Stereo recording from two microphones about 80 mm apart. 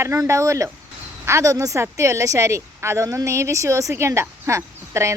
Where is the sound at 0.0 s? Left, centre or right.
Right.